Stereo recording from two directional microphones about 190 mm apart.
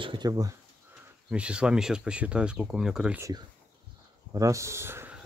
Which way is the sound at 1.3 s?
5° right (ahead or behind).